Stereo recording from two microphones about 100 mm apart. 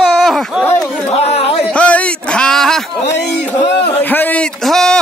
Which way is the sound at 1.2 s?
80° left.